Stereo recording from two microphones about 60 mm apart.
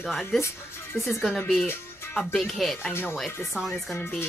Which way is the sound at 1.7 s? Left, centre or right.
Left.